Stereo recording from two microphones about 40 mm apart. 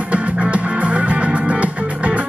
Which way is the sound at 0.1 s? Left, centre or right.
Right.